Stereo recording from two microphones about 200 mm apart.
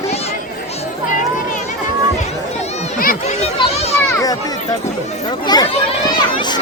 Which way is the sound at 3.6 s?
30° left (ahead or behind).